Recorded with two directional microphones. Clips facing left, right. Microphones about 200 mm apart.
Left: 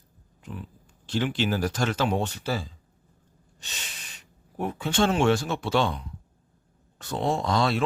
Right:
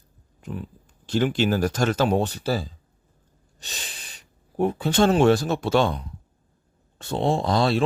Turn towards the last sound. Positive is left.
turn(degrees=-35)  # may be behind; listen again after turning